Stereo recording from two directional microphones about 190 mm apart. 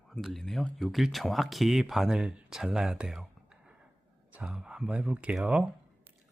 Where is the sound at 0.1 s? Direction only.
Centre (ahead or behind).